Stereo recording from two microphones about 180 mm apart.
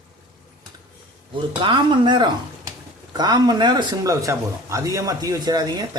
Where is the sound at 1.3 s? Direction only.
25° right (ahead or behind).